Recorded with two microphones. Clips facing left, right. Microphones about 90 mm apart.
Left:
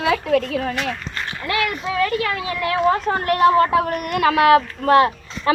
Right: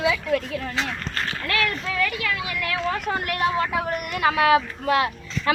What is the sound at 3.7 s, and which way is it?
Speech, 65° left (ahead or behind).